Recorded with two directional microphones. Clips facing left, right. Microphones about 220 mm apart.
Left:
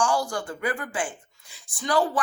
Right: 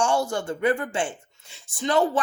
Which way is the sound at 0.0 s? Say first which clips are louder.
Right 2 dB; 25° right (ahead or behind).